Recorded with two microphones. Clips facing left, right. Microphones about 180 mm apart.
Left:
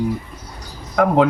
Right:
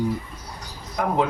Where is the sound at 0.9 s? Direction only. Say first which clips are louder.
Left 8 dB; 75° left (ahead or behind).